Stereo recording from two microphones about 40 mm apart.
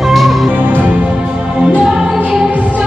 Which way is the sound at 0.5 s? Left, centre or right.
Right.